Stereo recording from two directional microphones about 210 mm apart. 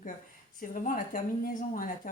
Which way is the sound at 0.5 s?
40° left (ahead or behind).